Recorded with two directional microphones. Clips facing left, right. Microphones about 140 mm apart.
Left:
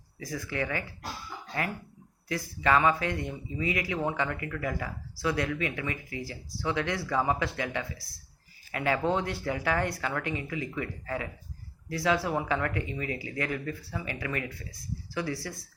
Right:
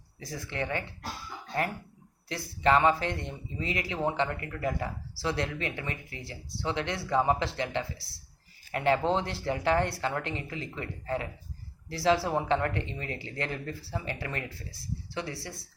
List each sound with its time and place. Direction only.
0.2 s speech: 30° right (ahead or behind)
2.3 s speech: 25° right (ahead or behind)